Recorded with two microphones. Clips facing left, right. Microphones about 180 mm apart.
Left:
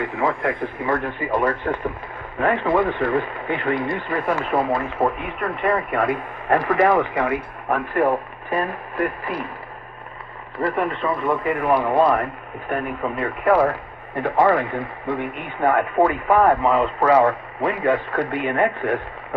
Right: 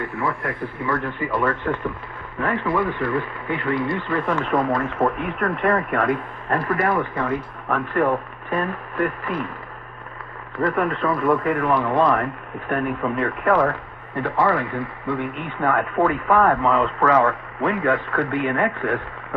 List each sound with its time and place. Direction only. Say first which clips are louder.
0.0 s speech: left 4 dB; 20° left (ahead or behind)
10.8 s speech: right 1 dB; centre (ahead or behind)
11.5 s speech: left 1 dB; 10° left (ahead or behind)